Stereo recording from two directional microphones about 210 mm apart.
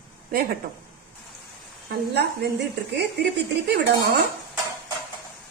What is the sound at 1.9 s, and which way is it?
Speech, 50° right (ahead or behind).